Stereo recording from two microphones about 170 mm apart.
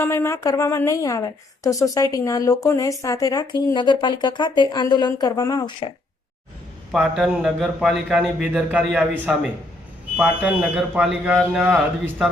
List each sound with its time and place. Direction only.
0.0 s speech: 15° left (ahead or behind)
6.9 s a man's voice: 5° right (ahead or behind)